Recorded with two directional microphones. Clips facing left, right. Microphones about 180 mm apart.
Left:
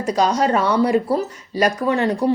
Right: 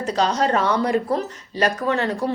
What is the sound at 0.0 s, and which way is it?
A woman's voice, 10° left (ahead or behind).